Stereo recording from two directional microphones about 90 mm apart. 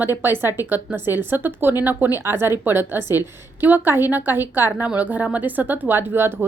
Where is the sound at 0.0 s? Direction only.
25° right (ahead or behind).